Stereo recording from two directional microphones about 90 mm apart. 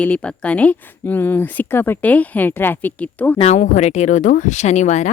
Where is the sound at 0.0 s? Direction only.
15° left (ahead or behind).